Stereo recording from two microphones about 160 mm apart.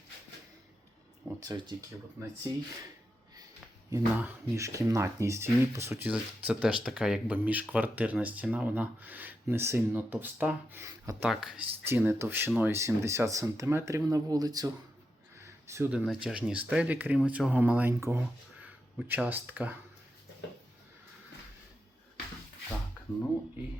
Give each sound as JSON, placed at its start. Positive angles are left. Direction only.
{"t": 1.4, "sound": "speech", "side_deg": -25}
{"t": 3.8, "sound": "speech", "side_deg": -15}
{"t": 11.3, "sound": "speech", "side_deg": -5}
{"t": 11.9, "sound": "speech", "side_deg": -15}